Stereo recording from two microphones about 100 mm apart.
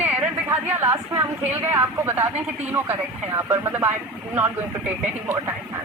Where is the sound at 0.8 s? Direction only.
25° right (ahead or behind).